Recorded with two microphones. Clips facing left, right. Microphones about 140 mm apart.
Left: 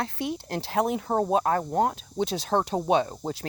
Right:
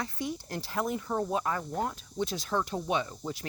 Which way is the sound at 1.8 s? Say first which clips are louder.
Left 6 dB; 90° left.